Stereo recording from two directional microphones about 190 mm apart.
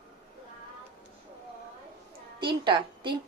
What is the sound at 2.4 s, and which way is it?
Speech, 25° right (ahead or behind).